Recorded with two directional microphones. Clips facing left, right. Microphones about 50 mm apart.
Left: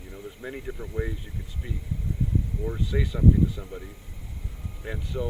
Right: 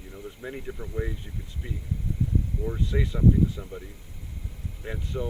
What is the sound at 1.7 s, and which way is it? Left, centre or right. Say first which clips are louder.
Speech: left 1 dB; centre.